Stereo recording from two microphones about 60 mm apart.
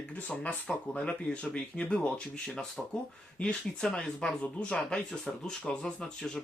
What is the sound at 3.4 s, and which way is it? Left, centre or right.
Speech, centre.